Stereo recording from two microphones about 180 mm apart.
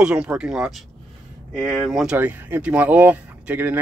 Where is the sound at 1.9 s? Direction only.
5° right (ahead or behind).